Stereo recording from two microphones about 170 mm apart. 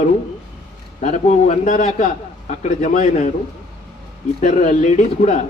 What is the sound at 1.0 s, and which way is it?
A man's voice, 40° left (ahead or behind).